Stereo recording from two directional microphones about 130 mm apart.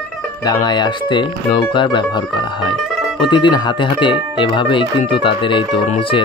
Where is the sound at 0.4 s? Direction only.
30° left (ahead or behind).